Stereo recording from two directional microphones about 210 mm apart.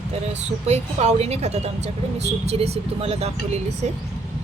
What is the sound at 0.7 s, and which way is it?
A woman's voice, 30° right (ahead or behind).